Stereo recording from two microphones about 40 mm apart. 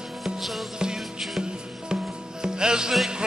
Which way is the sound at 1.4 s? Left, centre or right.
Centre.